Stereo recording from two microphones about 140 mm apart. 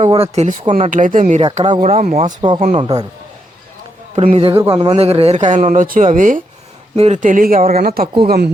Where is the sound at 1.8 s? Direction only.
70° right (ahead or behind).